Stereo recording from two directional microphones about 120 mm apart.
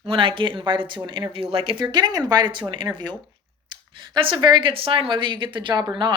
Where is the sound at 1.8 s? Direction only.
35° right (ahead or behind).